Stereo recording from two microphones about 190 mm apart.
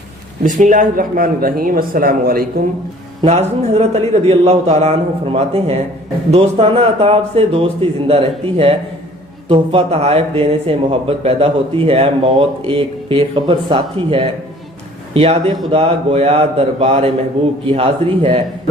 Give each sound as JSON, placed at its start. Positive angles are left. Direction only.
{"t": 0.4, "sound": "speech", "side_deg": -40}
{"t": 3.2, "sound": "a man's voice", "side_deg": -35}